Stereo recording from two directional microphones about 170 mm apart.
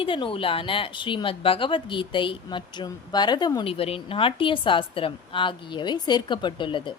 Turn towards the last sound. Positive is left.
turn(degrees=30)  # may be behind; listen again after turning